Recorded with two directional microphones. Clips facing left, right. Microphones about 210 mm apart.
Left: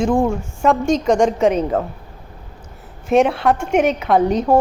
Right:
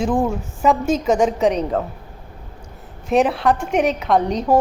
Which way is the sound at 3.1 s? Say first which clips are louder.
Left 2 dB; centre (ahead or behind).